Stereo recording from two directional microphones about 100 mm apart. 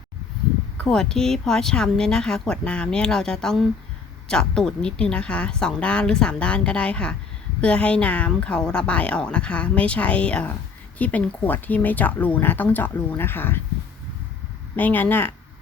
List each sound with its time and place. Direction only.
0.9 s speech: 5° left (ahead or behind); by 13.6 s 20° left (ahead or behind)
14.8 s speech: 20° left (ahead or behind)